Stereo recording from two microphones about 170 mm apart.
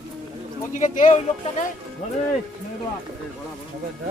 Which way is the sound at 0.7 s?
50° left (ahead or behind).